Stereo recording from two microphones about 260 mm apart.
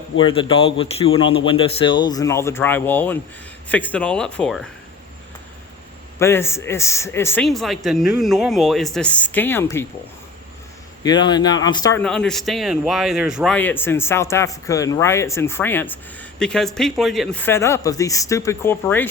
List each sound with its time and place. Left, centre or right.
0.2 s a man's voice: centre
6.1 s a man's voice: centre
11.0 s a man's voice: centre